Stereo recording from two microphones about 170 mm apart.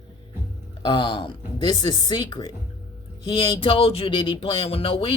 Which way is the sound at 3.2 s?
30° left (ahead or behind).